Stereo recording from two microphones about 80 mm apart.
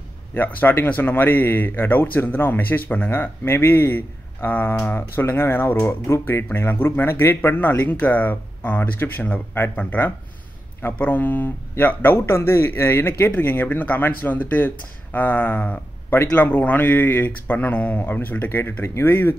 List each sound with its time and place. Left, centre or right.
0.3 s speech: left